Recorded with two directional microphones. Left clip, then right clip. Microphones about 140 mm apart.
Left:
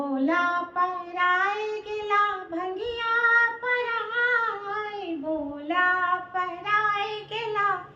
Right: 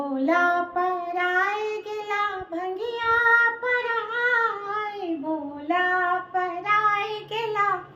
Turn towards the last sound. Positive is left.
turn(degrees=-40)  # may be behind; listen again after turning